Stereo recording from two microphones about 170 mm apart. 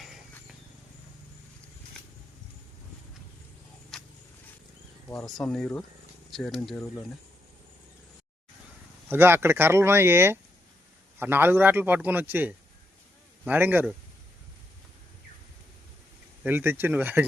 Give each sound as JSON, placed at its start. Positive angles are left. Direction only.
{"t": 3.9, "sound": "vehicle", "side_deg": 0}
{"t": 5.2, "sound": "speech", "side_deg": 0}
{"t": 6.7, "sound": "speech", "side_deg": 15}
{"t": 9.0, "sound": "a man's voice", "side_deg": -15}
{"t": 16.4, "sound": "a man's voice", "side_deg": -10}